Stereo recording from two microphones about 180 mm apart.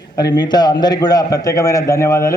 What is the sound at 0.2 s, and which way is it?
A man's voice, 20° left (ahead or behind).